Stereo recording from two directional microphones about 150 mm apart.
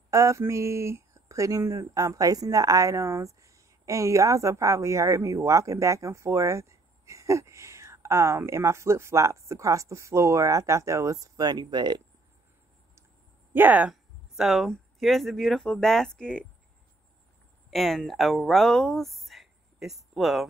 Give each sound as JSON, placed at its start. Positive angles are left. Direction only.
{"t": 0.1, "sound": "speech", "side_deg": -20}
{"t": 13.5, "sound": "speech", "side_deg": -10}
{"t": 17.6, "sound": "speech", "side_deg": 0}